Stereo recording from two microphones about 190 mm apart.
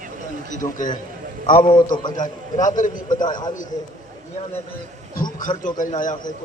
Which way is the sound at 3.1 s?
20° left (ahead or behind).